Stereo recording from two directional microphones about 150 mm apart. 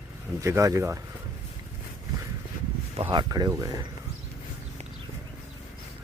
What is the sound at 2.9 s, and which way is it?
Speech, 35° right (ahead or behind).